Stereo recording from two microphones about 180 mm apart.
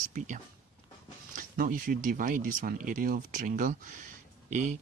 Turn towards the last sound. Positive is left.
turn(degrees=-45)  # may be behind; listen again after turning